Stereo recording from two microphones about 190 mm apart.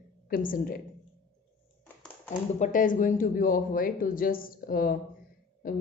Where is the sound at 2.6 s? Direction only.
45° left (ahead or behind).